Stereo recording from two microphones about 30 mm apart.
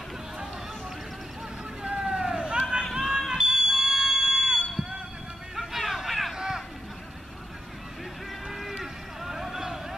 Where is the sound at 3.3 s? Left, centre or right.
Centre.